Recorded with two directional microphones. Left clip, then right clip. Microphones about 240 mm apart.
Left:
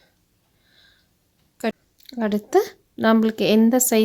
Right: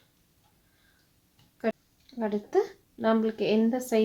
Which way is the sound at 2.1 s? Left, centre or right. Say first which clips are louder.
Left 7 dB; left.